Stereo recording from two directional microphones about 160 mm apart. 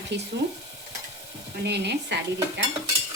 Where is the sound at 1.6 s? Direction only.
90° right.